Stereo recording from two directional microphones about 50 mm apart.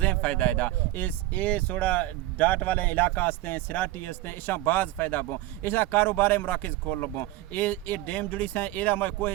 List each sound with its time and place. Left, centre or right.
0.0 s speech: left